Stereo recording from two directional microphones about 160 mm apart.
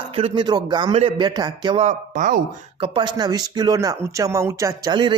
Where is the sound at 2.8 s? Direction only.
30° right (ahead or behind).